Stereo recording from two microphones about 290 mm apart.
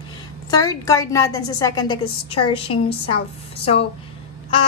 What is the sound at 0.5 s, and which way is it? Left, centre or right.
A woman's voice, centre.